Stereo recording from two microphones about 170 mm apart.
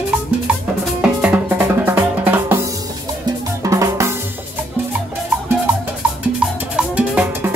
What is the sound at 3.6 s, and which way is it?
Drum, 20° right (ahead or behind).